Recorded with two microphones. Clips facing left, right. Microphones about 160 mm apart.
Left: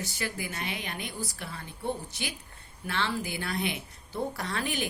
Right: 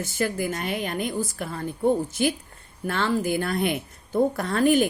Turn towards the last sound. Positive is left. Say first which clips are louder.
# right 12 dB
turn(degrees=-50)  # may be behind; listen again after turning